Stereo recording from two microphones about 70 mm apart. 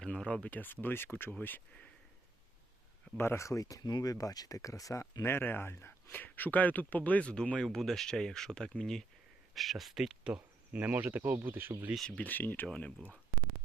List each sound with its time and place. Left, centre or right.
0.0 s speech: centre
0.5 s a man's voice: left
3.2 s speech: left
3.8 s speech: left
5.2 s a man's voice: left
7.6 s speech: centre
9.6 s speech: centre
10.7 s speech: right
12.1 s a man's voice: left